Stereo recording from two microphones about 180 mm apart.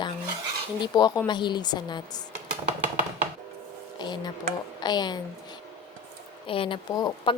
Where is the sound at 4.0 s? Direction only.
25° left (ahead or behind).